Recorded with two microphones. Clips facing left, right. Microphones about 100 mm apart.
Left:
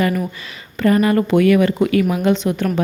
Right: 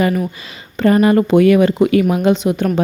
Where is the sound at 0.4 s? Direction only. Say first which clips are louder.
Right 2 dB; 25° right (ahead or behind).